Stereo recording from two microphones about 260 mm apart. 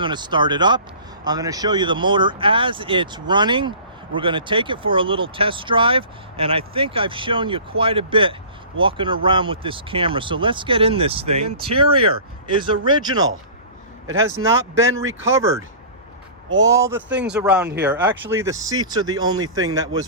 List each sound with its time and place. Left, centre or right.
0.0 s speech: centre